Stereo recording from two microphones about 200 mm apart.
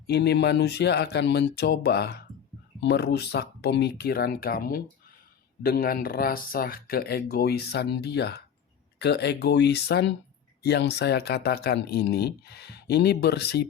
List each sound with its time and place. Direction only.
0.1 s speech: 55° left (ahead or behind)